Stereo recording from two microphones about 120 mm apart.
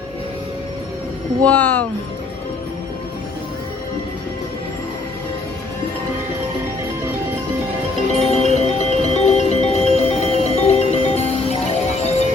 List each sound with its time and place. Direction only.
1.5 s speech: 15° left (ahead or behind)
8.3 s music: 65° left (ahead or behind)